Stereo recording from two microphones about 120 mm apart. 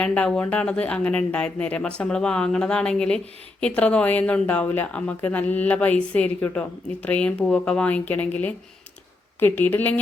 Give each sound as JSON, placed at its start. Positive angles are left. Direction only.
{"t": 0.0, "sound": "speech", "side_deg": 10}